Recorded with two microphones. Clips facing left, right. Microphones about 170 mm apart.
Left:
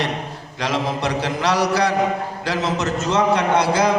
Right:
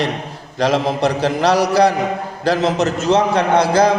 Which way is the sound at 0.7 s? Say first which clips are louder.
Right 4 dB; 35° right (ahead or behind).